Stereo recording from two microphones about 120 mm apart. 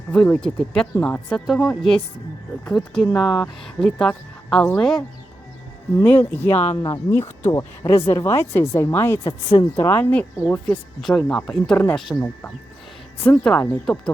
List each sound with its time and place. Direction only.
0.1 s speech: 10° left (ahead or behind)
1.3 s speech: 5° left (ahead or behind)
3.2 s speech: 30° left (ahead or behind)
3.6 s speech: 5° left (ahead or behind)
6.0 s speech: 15° left (ahead or behind)
6.5 s speech: 60° left (ahead or behind)
7.1 s speech: 20° left (ahead or behind)
11.0 s speech: 5° left (ahead or behind)